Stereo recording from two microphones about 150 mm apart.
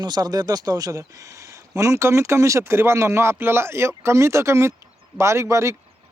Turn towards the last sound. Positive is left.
turn(degrees=-20)  # may be behind; listen again after turning